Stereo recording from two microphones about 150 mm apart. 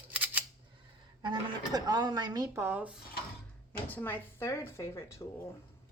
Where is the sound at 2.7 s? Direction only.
10° right (ahead or behind).